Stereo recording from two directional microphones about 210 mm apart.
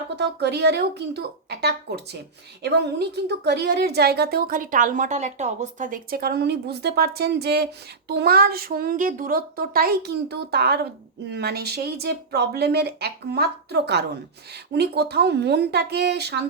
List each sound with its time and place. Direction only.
0.2 s a woman's voice: 50° right (ahead or behind)